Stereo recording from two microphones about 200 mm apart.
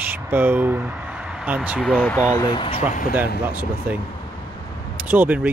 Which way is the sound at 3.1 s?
10° right (ahead or behind).